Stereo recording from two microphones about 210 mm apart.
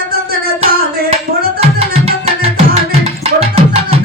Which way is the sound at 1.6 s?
30° right (ahead or behind).